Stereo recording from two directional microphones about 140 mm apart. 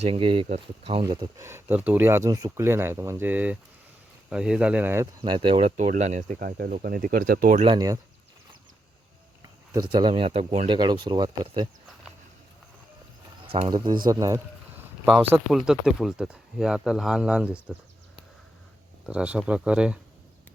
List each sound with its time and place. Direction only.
0.0 s speech: 40° right (ahead or behind)
1.0 s speech: 35° right (ahead or behind)
1.4 s speech: 20° right (ahead or behind)
5.2 s speech: 35° right (ahead or behind)
5.5 s speech: 55° right (ahead or behind); by 7.6 s 85° right
7.6 s speech: 30° right (ahead or behind)
9.7 s speech: 35° right (ahead or behind); by 10.7 s 50° right (ahead or behind)
10.7 s speech: 30° right (ahead or behind)
13.7 s speech: 35° right (ahead or behind)
14.1 s speech: 25° right (ahead or behind)
15.5 s speech: 5° right (ahead or behind)
19.0 s speech: 10° right (ahead or behind)